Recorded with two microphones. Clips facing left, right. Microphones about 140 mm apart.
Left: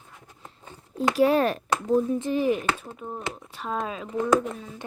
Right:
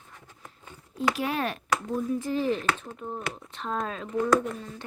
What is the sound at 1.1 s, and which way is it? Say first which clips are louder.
Speech: left 9 dB; 35° left (ahead or behind).